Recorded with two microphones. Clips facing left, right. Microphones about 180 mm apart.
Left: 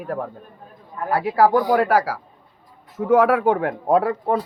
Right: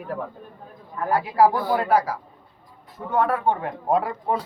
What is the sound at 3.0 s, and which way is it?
A man's voice, 90° left.